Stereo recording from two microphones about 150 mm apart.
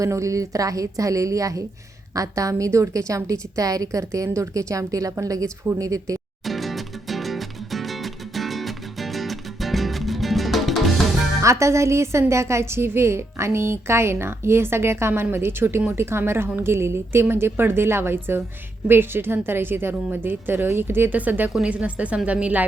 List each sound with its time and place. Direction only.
0.0 s a woman's voice: 20° right (ahead or behind)
6.4 s music: centre (ahead or behind)
11.4 s a woman's voice: 20° right (ahead or behind)